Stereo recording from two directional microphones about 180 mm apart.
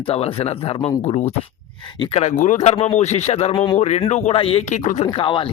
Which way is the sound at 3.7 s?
40° left (ahead or behind).